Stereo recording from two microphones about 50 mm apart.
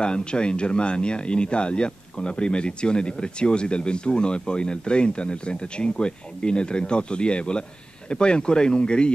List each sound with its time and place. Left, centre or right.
0.0 s speech: centre